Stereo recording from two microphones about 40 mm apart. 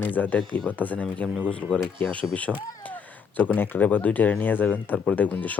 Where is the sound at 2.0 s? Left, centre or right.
Left.